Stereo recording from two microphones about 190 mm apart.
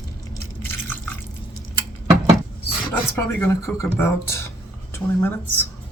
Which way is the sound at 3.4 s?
10° left (ahead or behind).